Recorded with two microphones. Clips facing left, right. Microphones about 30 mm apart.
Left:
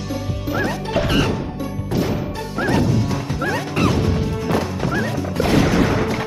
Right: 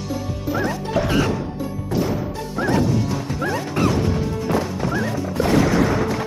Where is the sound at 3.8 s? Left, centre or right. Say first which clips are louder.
Left 1 dB; centre.